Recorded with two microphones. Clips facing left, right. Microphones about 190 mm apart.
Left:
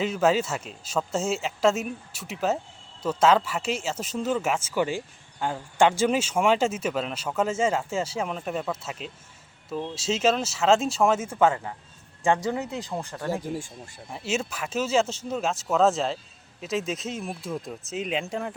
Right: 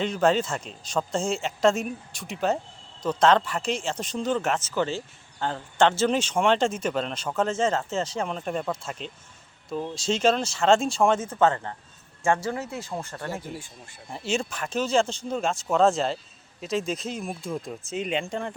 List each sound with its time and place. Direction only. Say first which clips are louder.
0.0 s speech: even; 5° left (ahead or behind)